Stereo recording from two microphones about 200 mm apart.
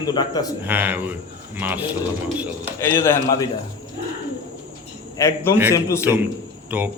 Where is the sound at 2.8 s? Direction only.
10° left (ahead or behind).